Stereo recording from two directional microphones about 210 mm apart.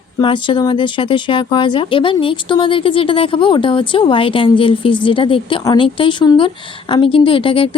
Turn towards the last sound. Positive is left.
turn(degrees=25)  # may be behind; listen again after turning